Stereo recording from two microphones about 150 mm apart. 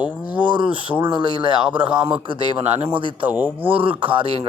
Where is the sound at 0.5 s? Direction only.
35° right (ahead or behind).